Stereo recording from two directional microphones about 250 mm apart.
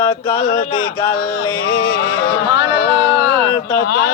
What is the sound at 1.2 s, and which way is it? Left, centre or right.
Speech, left.